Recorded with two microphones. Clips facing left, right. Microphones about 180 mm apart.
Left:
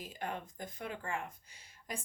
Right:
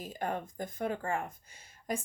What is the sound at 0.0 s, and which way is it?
Speech, 45° right (ahead or behind).